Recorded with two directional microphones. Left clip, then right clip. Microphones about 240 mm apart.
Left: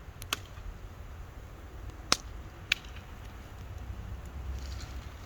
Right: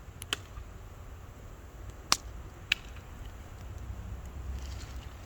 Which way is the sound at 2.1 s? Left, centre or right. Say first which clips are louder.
Even; right.